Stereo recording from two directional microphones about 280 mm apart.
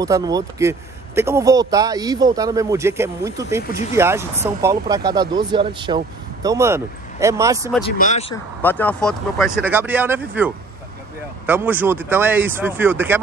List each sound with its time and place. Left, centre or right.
0.0 s speech: centre
7.8 s speech: left
8.6 s speech: centre